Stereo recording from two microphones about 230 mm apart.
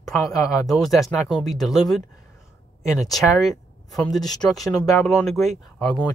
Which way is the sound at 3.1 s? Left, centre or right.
Centre.